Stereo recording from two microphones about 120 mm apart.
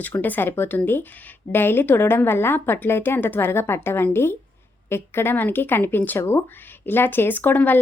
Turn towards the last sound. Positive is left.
turn(degrees=15)  # may be behind; listen again after turning